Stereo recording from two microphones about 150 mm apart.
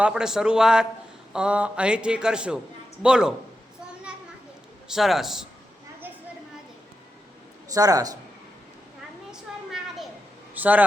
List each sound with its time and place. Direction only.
0.0 s a man's voice: 5° right (ahead or behind)
4.9 s a man's voice: centre (ahead or behind)
7.7 s speech: 25° right (ahead or behind)
10.5 s speech: 10° right (ahead or behind)